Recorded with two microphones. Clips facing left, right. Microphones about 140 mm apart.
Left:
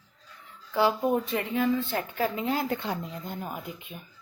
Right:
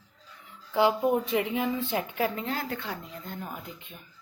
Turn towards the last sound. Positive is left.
turn(degrees=15)  # may be behind; listen again after turning